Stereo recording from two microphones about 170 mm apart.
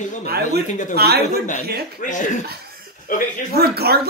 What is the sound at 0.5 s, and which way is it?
Speech, 50° left (ahead or behind).